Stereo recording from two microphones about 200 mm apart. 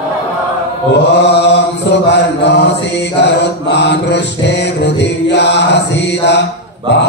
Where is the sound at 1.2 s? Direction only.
60° left (ahead or behind).